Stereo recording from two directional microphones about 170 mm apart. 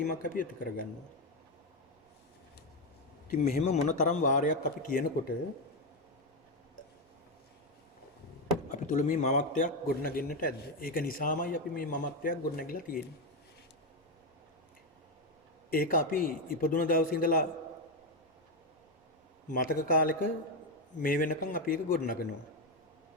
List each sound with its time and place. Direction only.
0.1 s a man's voice: 55° left (ahead or behind)
3.2 s a man's voice: 45° left (ahead or behind)
8.7 s a man's voice: 45° left (ahead or behind)
15.7 s a man's voice: 55° left (ahead or behind)
19.5 s a man's voice: 55° left (ahead or behind)